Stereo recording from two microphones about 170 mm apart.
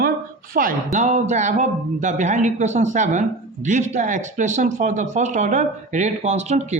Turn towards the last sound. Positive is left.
turn(degrees=-40)  # may be behind; listen again after turning